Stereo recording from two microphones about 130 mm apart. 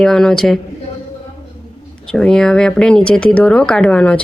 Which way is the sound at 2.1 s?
5° left (ahead or behind).